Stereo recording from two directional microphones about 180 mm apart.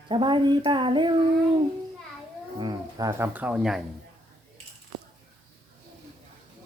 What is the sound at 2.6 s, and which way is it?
Speech, 25° right (ahead or behind).